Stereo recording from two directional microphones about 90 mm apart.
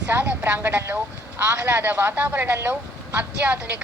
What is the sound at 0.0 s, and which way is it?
Speech, 15° right (ahead or behind).